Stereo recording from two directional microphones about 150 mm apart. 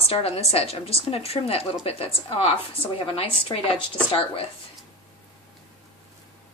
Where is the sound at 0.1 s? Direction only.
40° left (ahead or behind).